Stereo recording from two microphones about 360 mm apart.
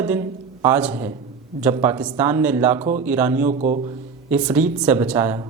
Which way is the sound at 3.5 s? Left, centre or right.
Centre.